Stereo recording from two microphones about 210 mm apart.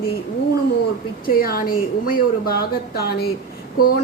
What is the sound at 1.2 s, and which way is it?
Speech, 45° left (ahead or behind).